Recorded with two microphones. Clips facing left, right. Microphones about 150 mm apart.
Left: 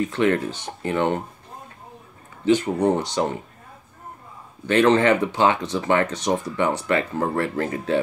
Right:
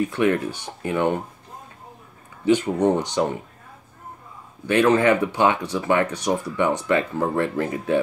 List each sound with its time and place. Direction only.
0.0 s speech: 15° right (ahead or behind)
2.4 s speech: 15° right (ahead or behind)
4.6 s speech: 10° right (ahead or behind)